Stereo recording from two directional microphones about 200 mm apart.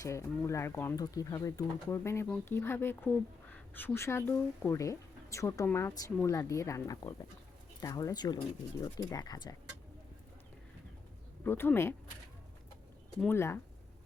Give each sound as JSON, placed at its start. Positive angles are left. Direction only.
{"t": 0.0, "sound": "speech", "side_deg": 15}
{"t": 11.4, "sound": "speech", "side_deg": 10}
{"t": 13.1, "sound": "speech", "side_deg": 10}